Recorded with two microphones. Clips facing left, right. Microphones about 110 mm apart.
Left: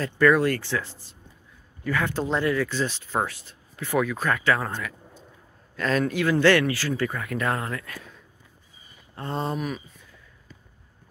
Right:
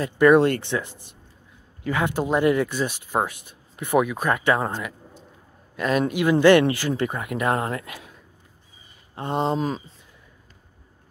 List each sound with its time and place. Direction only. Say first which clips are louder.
0.0 s speech: right 4 dB; 20° right (ahead or behind)
5.8 s speech: right 2 dB; 15° right (ahead or behind)
7.6 s speech: right 4 dB; 30° right (ahead or behind)
9.1 s speech: right 5 dB; 20° right (ahead or behind)